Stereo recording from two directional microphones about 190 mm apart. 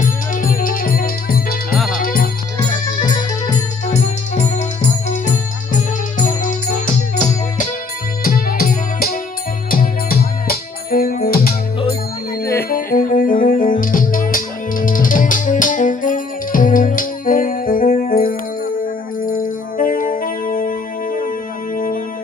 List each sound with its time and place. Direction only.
0.0 s music: 45° left (ahead or behind)
3.0 s music: 20° left (ahead or behind)
4.4 s music: 40° left (ahead or behind)
8.2 s music: 50° left (ahead or behind)
12.4 s music: 15° left (ahead or behind)
12.6 s music: 50° left (ahead or behind)